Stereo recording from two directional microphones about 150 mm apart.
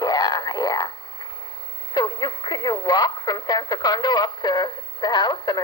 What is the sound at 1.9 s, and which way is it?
Speech, 25° left (ahead or behind).